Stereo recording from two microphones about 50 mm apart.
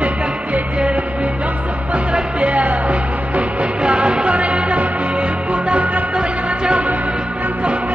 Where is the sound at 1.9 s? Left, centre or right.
Right.